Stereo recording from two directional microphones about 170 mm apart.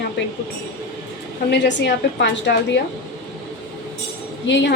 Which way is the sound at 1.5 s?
90° left.